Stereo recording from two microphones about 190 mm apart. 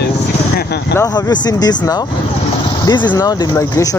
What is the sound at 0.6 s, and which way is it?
Speech, 60° left (ahead or behind).